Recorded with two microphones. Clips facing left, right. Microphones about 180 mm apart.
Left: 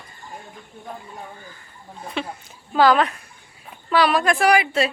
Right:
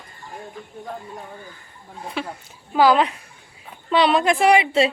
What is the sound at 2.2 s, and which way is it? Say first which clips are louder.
Speech: left 1 dB; 5° right (ahead or behind).